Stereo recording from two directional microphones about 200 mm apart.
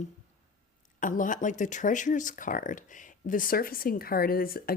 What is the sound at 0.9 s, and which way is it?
Speech, 40° left (ahead or behind).